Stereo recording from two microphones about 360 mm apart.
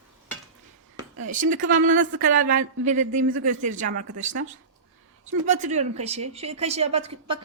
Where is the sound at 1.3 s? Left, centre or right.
Right.